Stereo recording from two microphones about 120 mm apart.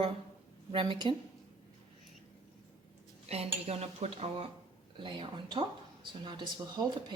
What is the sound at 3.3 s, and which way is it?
Dishes, 60° right (ahead or behind).